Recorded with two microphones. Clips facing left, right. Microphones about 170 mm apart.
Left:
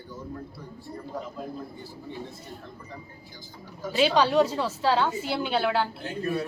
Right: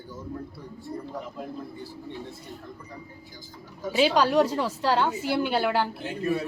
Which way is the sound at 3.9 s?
10° right (ahead or behind).